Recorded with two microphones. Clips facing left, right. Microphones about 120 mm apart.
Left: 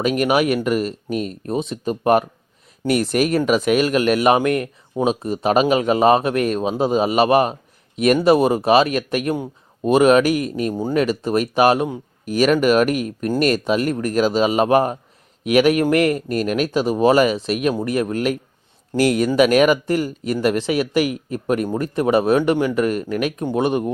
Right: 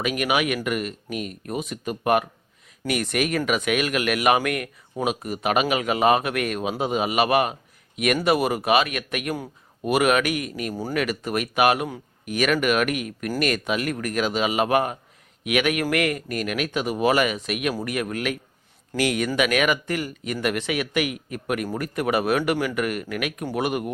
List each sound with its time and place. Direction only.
0.0 s speech: 35° left (ahead or behind)